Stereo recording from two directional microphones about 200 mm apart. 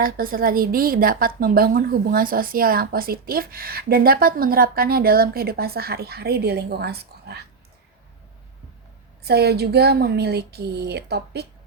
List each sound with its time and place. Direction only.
0.0 s a woman's voice: 45° right (ahead or behind)
9.2 s a woman's voice: 55° right (ahead or behind)